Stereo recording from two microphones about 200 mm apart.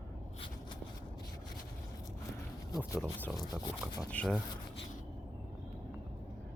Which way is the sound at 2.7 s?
15° left (ahead or behind).